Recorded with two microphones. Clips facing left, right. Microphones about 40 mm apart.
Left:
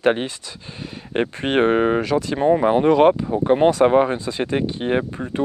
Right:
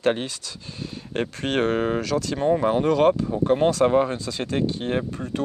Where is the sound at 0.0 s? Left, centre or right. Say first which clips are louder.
Left 4 dB; left.